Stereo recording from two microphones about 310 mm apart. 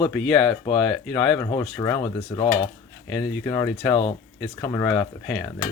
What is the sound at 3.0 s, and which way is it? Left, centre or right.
Speech, centre.